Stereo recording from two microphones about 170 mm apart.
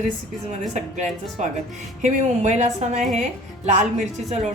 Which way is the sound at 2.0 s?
45° right (ahead or behind).